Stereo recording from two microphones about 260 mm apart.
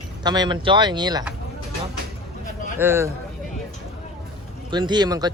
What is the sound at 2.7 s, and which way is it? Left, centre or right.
Speech, centre.